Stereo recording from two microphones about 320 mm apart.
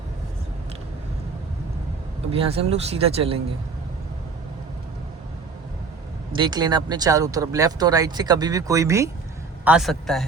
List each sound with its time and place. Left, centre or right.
2.3 s speech: centre
6.3 s a man's voice: centre